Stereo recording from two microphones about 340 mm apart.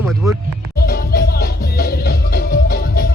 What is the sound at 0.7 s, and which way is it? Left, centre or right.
Music, left.